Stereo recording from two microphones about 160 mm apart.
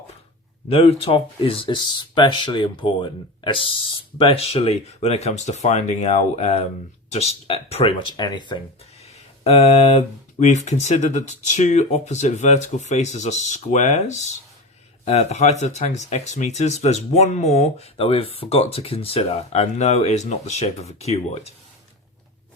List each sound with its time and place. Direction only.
0.7 s speech: 40° left (ahead or behind)
9.4 s speech: 40° left (ahead or behind)